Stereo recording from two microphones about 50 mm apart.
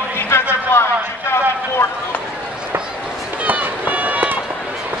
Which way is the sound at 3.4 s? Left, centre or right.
Right.